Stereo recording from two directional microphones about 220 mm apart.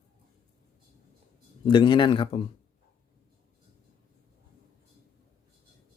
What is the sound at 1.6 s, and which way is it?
Speech, 20° left (ahead or behind).